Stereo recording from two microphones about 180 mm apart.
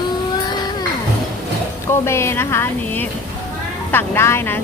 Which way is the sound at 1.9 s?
15° left (ahead or behind).